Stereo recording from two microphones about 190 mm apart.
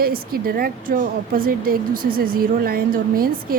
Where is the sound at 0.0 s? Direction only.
50° right (ahead or behind).